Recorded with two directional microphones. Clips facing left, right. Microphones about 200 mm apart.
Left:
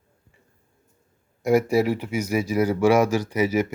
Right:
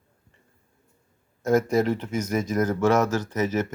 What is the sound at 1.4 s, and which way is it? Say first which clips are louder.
Speech: left 2 dB; 10° left (ahead or behind).